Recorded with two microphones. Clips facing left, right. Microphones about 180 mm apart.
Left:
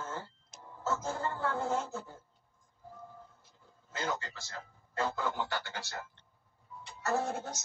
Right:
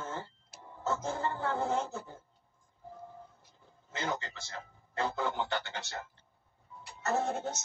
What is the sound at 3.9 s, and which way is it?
A man's voice, 20° right (ahead or behind).